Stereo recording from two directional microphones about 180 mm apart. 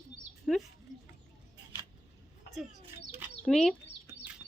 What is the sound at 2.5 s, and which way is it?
Chicken, 60° left (ahead or behind).